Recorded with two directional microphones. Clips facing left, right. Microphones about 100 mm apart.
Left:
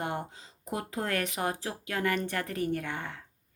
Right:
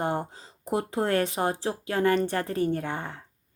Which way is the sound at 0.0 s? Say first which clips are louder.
Right 6 dB; 30° right (ahead or behind).